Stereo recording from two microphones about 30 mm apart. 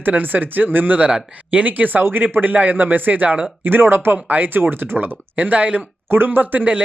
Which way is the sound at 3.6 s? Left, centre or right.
Right.